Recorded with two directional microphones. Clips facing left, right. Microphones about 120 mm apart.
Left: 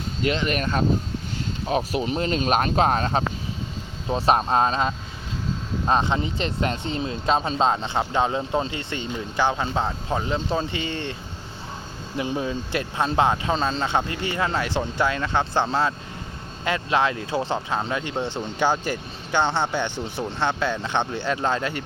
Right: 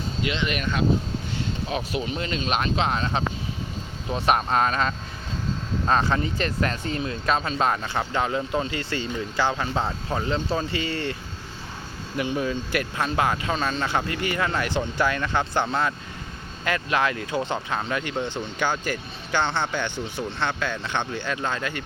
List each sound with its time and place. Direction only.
0.2 s speech: 40° left (ahead or behind)
4.1 s speech: 30° left (ahead or behind)